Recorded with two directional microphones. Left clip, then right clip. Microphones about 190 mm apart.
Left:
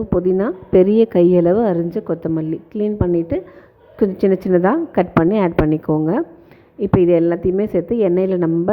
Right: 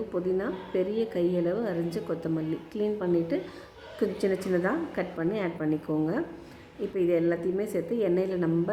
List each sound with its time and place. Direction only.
0.3 s a woman's voice: 40° left (ahead or behind)